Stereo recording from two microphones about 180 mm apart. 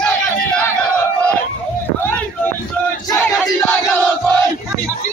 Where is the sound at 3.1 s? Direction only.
15° left (ahead or behind).